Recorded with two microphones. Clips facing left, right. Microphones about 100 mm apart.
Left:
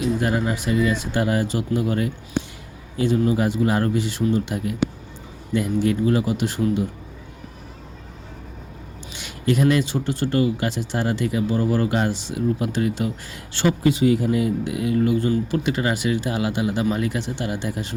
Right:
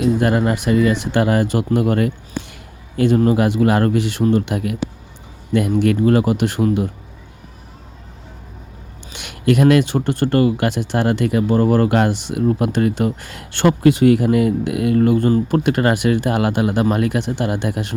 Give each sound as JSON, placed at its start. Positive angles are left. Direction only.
{"t": 0.2, "sound": "a man's voice", "side_deg": -60}
{"t": 9.1, "sound": "speech", "side_deg": -65}